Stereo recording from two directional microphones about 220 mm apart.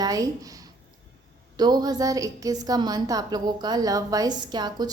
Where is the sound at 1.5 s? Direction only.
20° right (ahead or behind).